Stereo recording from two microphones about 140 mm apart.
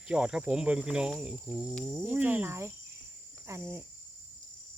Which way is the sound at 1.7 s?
5° left (ahead or behind).